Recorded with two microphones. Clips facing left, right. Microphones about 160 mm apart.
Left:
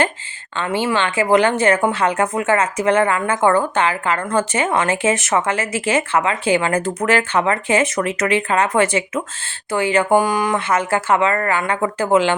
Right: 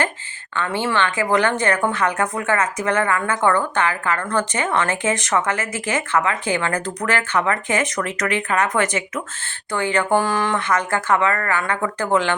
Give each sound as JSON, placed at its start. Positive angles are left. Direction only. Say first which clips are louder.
{"t": 0.5, "sound": "a woman's voice", "louder": "left 2 dB", "side_deg": 15}
{"t": 10.0, "sound": "a woman's voice", "louder": "left 2 dB", "side_deg": 15}